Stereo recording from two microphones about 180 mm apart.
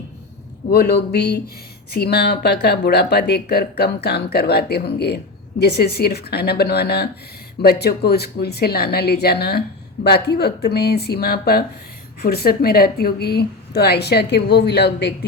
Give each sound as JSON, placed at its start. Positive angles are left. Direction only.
{"t": 0.7, "sound": "speech", "side_deg": 60}